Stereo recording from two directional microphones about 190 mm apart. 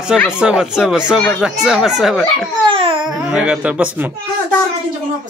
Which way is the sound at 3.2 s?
5° right (ahead or behind).